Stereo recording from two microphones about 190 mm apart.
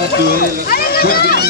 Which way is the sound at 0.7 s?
55° left (ahead or behind).